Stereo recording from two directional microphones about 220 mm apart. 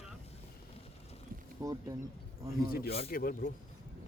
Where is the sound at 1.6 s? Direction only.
15° right (ahead or behind).